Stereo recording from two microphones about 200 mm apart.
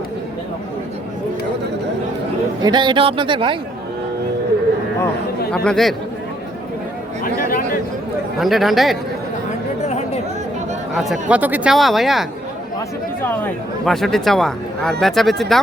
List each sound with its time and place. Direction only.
2.6 s a man's voice: 20° right (ahead or behind)
5.5 s speech: centre (ahead or behind)
7.3 s chatter: 45° left (ahead or behind)
8.4 s speech: centre (ahead or behind)
10.9 s speech: 5° right (ahead or behind)
13.2 s speech: 10° left (ahead or behind)